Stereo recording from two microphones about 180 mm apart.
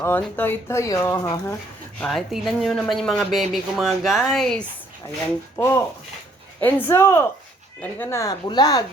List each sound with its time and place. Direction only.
0.0 s speech: 10° left (ahead or behind)
2.0 s speech: centre (ahead or behind)
6.6 s speech: 10° left (ahead or behind)